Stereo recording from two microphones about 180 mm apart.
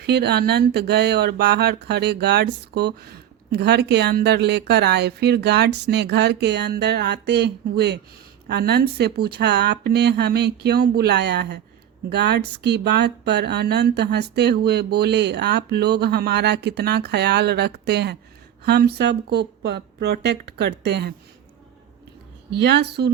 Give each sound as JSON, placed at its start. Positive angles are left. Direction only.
{"t": 0.0, "sound": "speech", "side_deg": -65}
{"t": 22.4, "sound": "speech", "side_deg": -70}